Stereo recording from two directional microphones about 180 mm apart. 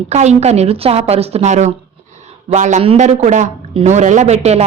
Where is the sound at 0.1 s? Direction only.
40° right (ahead or behind).